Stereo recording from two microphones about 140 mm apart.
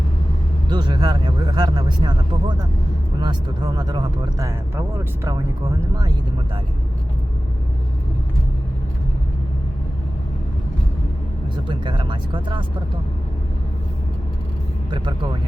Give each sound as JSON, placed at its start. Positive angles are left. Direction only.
{"t": 0.7, "sound": "speech", "side_deg": -35}
{"t": 11.7, "sound": "speech", "side_deg": -35}
{"t": 14.8, "sound": "speech", "side_deg": -30}